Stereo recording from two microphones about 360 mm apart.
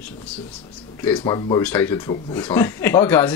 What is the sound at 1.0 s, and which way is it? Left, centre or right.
Speech, centre.